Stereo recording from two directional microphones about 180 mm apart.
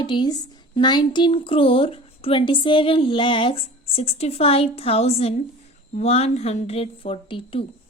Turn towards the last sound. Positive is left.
turn(degrees=30)  # may be behind; listen again after turning